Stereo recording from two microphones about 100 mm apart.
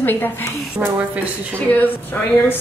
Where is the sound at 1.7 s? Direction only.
20° left (ahead or behind).